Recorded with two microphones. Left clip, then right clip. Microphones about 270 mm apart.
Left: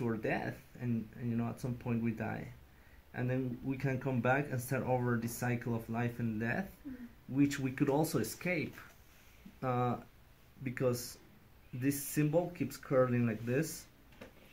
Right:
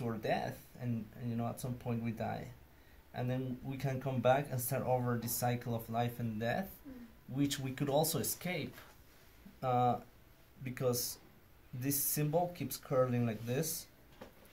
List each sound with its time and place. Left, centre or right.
0.0 s a sound: right
1.6 s speech: right
9.6 s speech: right